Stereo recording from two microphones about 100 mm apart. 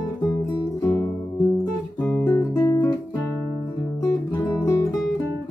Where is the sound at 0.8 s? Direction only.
25° left (ahead or behind).